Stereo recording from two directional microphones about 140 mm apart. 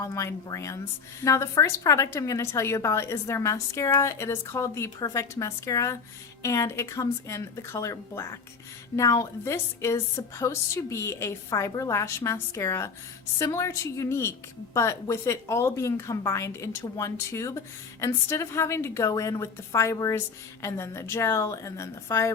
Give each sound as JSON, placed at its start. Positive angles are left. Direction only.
{"t": 0.0, "sound": "a woman's voice", "side_deg": 20}